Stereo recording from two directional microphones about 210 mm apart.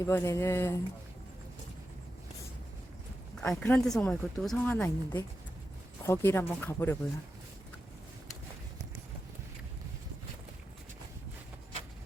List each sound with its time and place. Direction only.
0.0 s speech: 15° left (ahead or behind)
3.3 s speech: 5° left (ahead or behind)